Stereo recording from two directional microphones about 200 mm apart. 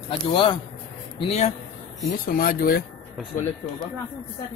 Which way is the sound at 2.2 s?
45° left (ahead or behind).